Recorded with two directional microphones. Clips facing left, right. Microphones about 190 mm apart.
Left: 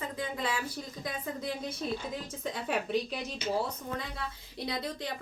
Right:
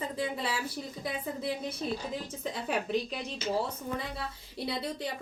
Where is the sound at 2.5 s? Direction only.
Centre (ahead or behind).